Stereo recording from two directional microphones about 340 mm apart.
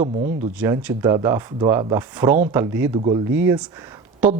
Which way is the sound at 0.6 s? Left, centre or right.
Centre.